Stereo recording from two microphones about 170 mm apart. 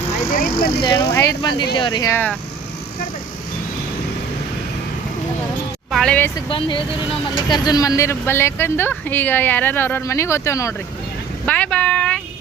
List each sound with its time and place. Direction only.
0.3 s speech: 60° left (ahead or behind)
0.8 s speech: 25° left (ahead or behind)
5.9 s speech: 5° left (ahead or behind)
6.3 s speech: 30° left (ahead or behind)
11.4 s a sound: 10° left (ahead or behind)